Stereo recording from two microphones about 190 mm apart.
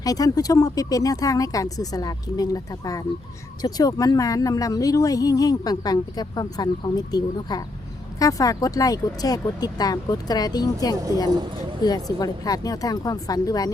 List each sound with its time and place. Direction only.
0.0 s speech: 20° left (ahead or behind)